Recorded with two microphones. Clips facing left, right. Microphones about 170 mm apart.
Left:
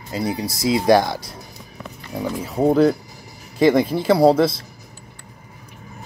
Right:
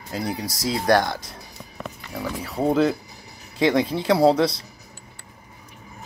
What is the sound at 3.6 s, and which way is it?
Speech, 5° left (ahead or behind).